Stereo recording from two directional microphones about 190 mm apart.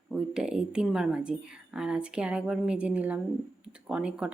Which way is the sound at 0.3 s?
5° right (ahead or behind).